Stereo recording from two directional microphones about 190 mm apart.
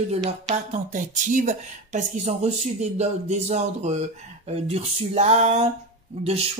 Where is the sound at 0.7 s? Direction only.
40° right (ahead or behind).